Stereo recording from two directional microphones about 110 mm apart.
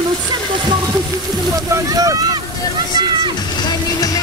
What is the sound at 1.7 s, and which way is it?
Speech, 30° right (ahead or behind).